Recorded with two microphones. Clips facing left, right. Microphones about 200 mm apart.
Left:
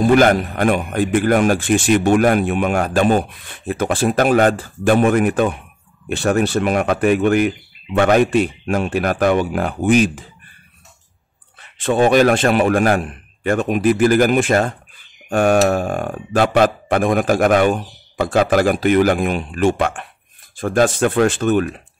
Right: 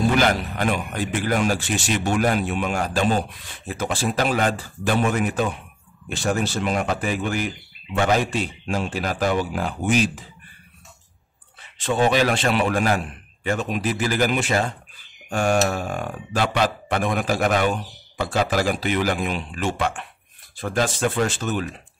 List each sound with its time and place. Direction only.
0.1 s a man's voice: 50° left (ahead or behind)
11.8 s a man's voice: 55° left (ahead or behind)